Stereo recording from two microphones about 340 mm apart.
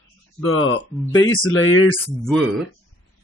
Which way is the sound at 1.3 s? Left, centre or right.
Left.